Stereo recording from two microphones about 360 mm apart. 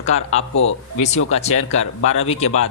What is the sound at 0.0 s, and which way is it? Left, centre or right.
Speech, centre.